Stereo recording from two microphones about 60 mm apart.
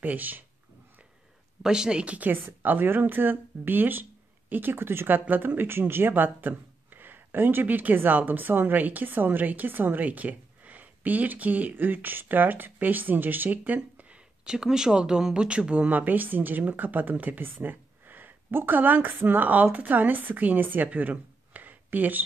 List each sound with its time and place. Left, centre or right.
0.0 s speech: right
1.6 s speech: centre; by 13.7 s right
13.9 s speech: centre
15.9 s speech: right